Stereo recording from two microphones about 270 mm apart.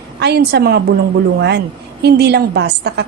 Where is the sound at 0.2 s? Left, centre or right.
Right.